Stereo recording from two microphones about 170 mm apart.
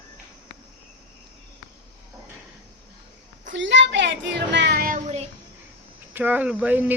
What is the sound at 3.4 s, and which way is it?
A woman's voice, 90° right.